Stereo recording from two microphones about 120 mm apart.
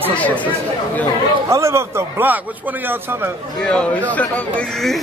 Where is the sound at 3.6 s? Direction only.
10° left (ahead or behind).